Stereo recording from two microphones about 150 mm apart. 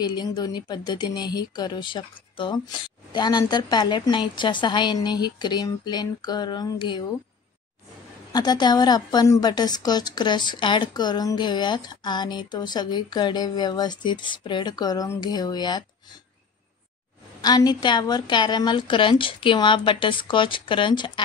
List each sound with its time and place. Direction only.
0.0 s a woman's voice: 30° left (ahead or behind)
8.3 s a woman's voice: 25° left (ahead or behind)
17.4 s a woman's voice: 25° left (ahead or behind)